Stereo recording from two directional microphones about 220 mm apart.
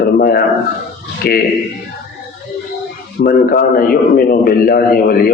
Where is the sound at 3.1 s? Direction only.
45° left (ahead or behind).